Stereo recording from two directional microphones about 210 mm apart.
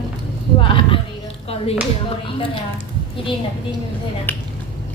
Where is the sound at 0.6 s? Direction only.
25° left (ahead or behind).